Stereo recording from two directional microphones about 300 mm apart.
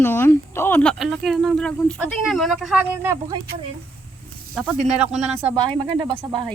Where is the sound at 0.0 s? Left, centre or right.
Centre.